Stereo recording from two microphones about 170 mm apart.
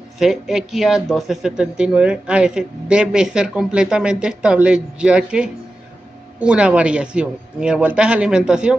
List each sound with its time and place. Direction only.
0.2 s speech: centre (ahead or behind)